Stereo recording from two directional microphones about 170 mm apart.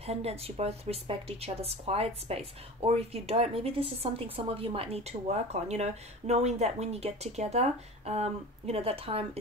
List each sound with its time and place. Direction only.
0.0 s a woman's voice: 35° right (ahead or behind)